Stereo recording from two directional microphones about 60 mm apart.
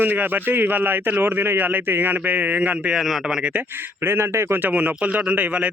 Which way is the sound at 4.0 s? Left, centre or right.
Right.